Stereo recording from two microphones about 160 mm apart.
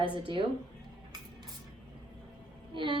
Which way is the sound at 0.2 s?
35° right (ahead or behind).